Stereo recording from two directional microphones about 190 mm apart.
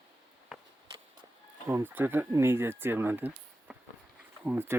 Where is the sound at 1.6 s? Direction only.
10° right (ahead or behind).